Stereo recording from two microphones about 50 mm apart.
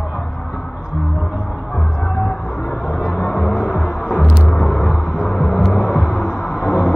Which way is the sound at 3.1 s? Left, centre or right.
Left.